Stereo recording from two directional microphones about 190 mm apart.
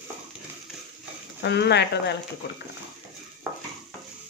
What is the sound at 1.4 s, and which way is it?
Speech, 65° left (ahead or behind).